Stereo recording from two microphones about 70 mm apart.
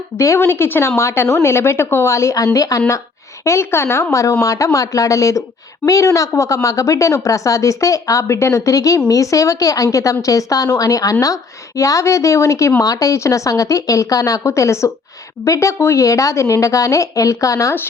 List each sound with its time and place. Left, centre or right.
0.3 s a woman's voice: left
4.1 s a woman's voice: left